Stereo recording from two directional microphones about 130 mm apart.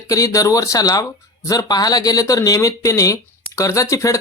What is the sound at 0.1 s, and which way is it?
Speech, 25° left (ahead or behind).